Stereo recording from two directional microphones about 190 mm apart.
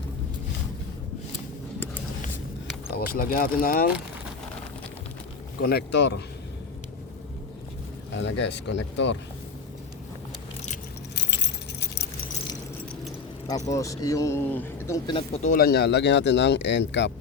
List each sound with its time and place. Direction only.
2.9 s speech: 50° left (ahead or behind)
5.6 s speech: 60° left (ahead or behind)
8.1 s speech: 70° left (ahead or behind)
11.1 s keys jangling: 65° left (ahead or behind)
13.7 s speech: 15° left (ahead or behind)
15.4 s speech: 50° left (ahead or behind); by 17.1 s 65° left (ahead or behind)